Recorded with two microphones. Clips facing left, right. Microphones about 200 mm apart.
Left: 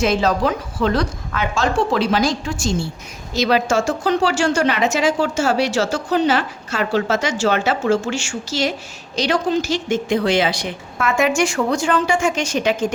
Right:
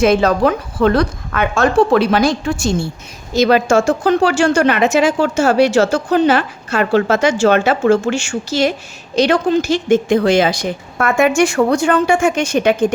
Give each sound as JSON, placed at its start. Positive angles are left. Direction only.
{"t": 0.0, "sound": "a woman's voice", "side_deg": -60}